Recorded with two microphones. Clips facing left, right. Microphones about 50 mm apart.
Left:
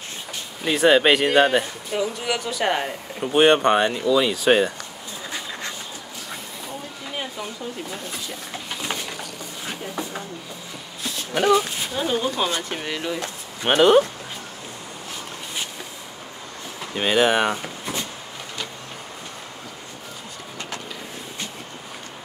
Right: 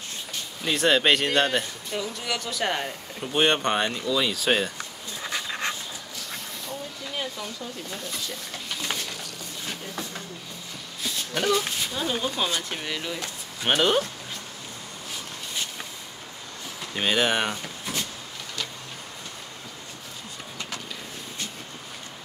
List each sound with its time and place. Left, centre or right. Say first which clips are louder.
0.7 s speech: left 5 dB; centre
7.1 s a sound: left 2 dB; left
11.3 s speech: left 6 dB; centre
16.8 s speech: left 5 dB; centre